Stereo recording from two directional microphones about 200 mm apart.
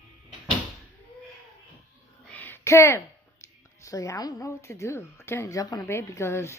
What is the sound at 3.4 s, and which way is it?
Speech, 15° left (ahead or behind).